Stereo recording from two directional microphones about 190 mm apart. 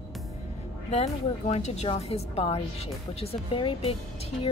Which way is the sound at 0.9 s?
35° left (ahead or behind).